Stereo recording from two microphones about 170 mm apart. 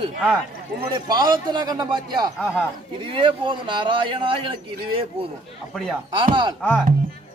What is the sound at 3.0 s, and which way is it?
A man's voice, 30° right (ahead or behind).